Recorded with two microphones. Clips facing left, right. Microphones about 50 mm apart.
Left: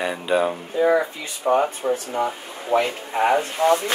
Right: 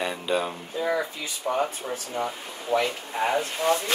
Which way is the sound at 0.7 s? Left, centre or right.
Left.